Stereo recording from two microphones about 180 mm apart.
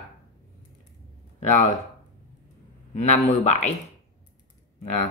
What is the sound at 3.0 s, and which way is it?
Speech, 40° left (ahead or behind).